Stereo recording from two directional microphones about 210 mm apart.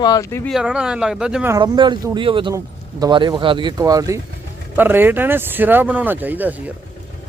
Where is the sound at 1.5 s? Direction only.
20° right (ahead or behind).